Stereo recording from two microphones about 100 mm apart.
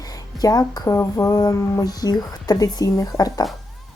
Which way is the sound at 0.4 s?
40° left (ahead or behind).